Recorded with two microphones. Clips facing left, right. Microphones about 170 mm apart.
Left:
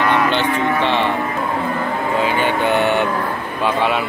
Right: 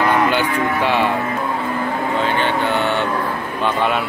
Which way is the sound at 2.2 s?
15° left (ahead or behind).